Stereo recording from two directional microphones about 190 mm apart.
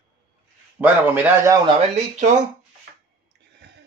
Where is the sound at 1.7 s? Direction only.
35° right (ahead or behind).